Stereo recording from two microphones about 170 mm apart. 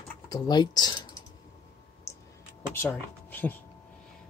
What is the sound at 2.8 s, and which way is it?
Speech, 10° left (ahead or behind).